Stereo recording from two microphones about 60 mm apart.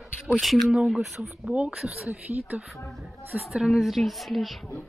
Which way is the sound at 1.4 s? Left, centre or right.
Centre.